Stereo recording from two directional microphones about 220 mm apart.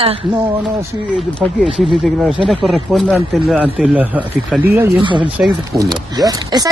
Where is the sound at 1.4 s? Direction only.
Centre (ahead or behind).